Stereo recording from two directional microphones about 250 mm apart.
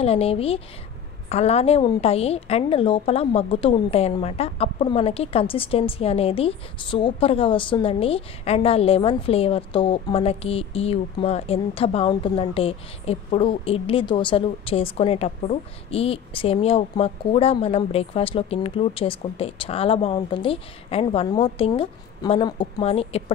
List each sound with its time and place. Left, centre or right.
0.0 s a woman's voice: left